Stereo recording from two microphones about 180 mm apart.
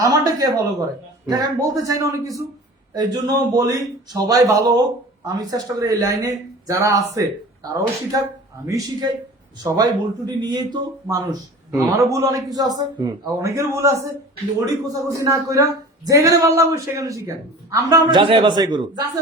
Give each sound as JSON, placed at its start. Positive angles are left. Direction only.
{"t": 0.0, "sound": "speech", "side_deg": -20}
{"t": 15.1, "sound": "a man's voice", "side_deg": -15}